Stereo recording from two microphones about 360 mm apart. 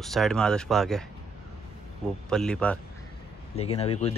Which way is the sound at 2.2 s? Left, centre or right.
Centre.